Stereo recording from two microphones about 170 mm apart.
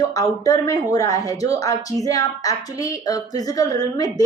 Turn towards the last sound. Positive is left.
turn(degrees=20)  # may be behind; listen again after turning